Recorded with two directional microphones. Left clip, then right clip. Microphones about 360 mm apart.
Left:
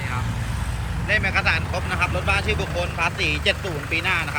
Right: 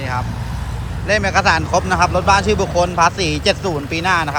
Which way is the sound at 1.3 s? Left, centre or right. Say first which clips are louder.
Right 8 dB; centre.